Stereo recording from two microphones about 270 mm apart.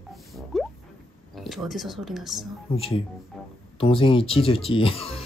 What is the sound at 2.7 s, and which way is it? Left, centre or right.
Speech, left.